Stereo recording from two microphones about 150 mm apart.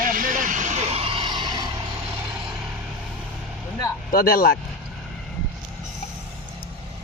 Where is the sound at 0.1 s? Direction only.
65° right (ahead or behind); by 1.7 s 30° right (ahead or behind).